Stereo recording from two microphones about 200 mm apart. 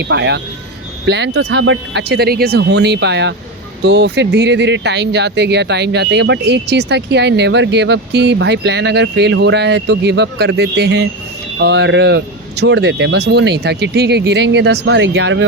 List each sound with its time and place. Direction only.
0.0 s speech: 60° right (ahead or behind)